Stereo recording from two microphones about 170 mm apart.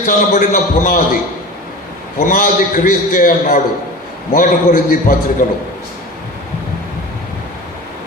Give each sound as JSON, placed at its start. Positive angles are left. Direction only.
{"t": 0.0, "sound": "a man's voice", "side_deg": 55}